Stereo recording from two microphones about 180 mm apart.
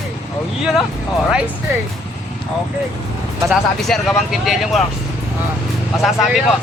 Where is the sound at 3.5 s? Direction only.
Centre (ahead or behind).